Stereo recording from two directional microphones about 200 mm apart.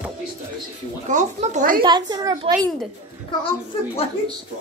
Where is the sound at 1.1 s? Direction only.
35° right (ahead or behind).